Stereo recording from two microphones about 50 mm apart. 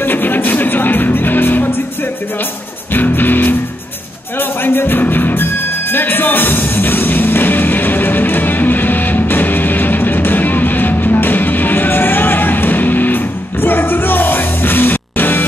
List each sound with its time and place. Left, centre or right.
0.0 s music: left
2.9 s music: left